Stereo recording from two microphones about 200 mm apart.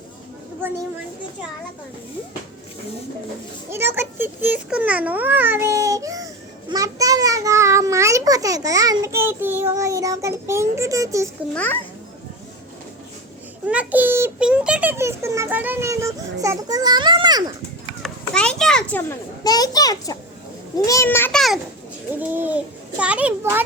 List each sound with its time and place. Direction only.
0.6 s a child's voice: 10° right (ahead or behind)
3.7 s a child's voice: 10° right (ahead or behind)
11.5 s a child's voice: 10° left (ahead or behind)
13.7 s a child's voice: 5° right (ahead or behind)
18.0 s children playing: 5° left (ahead or behind)
19.5 s a child's voice: 20° left (ahead or behind); by 21.6 s centre (ahead or behind)
22.2 s a child's voice: 10° right (ahead or behind)